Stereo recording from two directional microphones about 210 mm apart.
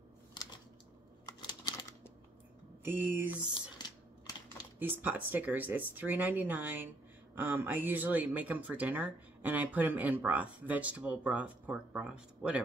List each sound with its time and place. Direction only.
1.2 s computer keyboard: 20° left (ahead or behind)
2.8 s speech: 10° right (ahead or behind)
4.7 s speech: 10° right (ahead or behind)